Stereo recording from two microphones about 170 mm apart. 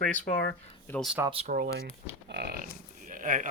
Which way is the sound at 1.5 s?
55° right (ahead or behind).